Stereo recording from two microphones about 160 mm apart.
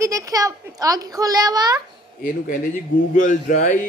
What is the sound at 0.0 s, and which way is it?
A woman's voice, 20° right (ahead or behind).